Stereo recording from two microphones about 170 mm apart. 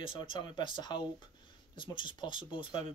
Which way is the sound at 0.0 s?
30° left (ahead or behind).